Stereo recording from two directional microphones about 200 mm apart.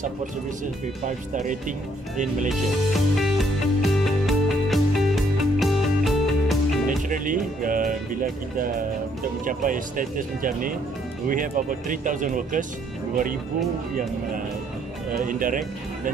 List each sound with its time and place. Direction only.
2.5 s music: centre (ahead or behind)
7.1 s speech: 40° right (ahead or behind)
15.2 s speech: 40° right (ahead or behind)